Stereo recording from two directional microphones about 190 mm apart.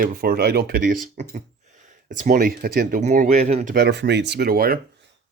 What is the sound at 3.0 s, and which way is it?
Speech, 40° right (ahead or behind).